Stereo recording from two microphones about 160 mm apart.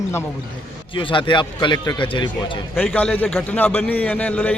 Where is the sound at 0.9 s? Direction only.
30° left (ahead or behind).